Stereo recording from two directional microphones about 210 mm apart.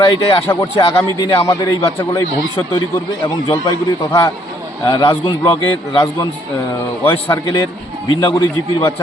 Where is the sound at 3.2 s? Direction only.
20° left (ahead or behind).